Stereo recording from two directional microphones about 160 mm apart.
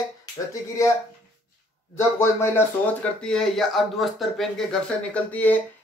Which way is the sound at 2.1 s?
15° left (ahead or behind).